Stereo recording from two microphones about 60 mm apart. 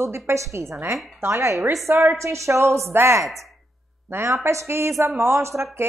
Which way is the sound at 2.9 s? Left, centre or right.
Right.